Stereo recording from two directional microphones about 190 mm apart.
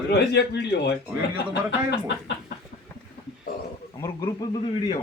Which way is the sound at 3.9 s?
20° left (ahead or behind).